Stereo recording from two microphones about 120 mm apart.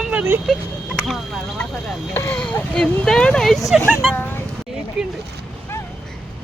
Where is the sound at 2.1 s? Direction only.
20° left (ahead or behind).